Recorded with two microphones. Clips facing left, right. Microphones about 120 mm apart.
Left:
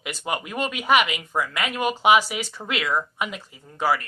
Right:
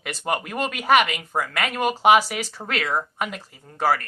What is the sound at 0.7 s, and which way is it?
Speech, 40° right (ahead or behind).